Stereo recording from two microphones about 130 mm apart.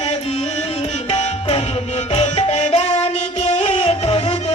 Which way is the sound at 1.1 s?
50° left (ahead or behind).